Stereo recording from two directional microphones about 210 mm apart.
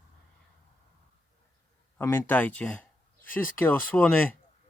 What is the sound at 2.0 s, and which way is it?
Speech, 10° left (ahead or behind).